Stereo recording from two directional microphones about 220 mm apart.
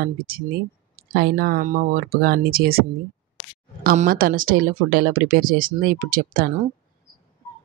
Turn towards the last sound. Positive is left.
turn(degrees=-40)  # may be behind; listen again after turning